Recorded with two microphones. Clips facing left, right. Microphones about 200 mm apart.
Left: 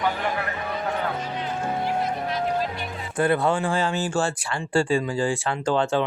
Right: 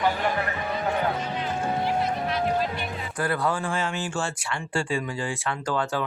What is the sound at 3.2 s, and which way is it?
Speech, 25° left (ahead or behind).